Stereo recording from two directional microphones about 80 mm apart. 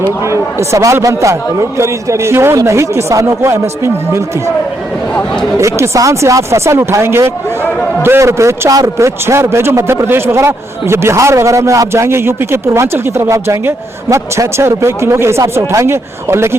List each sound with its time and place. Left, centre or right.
0.7 s a man's voice: right
5.5 s a man's voice: right